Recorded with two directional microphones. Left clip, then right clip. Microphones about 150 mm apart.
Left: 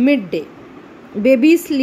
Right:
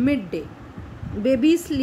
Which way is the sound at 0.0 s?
20° left (ahead or behind).